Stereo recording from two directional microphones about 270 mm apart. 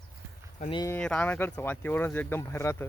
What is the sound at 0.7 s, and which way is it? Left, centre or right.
Speech, centre.